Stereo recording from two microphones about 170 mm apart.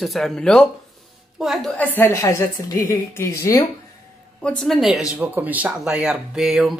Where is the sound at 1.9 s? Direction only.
15° left (ahead or behind).